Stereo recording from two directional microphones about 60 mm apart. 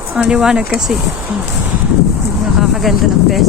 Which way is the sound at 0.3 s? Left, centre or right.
Centre.